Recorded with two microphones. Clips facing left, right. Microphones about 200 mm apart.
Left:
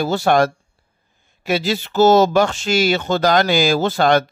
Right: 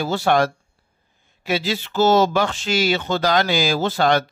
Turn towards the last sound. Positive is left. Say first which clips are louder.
# left 3 dB
turn(degrees=50)  # may be behind; listen again after turning